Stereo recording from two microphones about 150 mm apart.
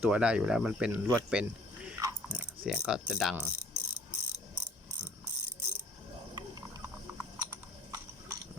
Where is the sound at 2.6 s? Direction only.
5° right (ahead or behind).